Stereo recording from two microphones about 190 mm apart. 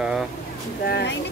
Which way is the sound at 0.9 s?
60° left (ahead or behind).